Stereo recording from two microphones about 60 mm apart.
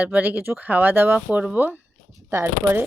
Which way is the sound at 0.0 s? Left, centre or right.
Right.